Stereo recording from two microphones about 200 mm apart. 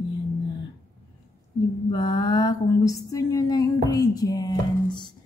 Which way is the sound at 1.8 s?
20° left (ahead or behind).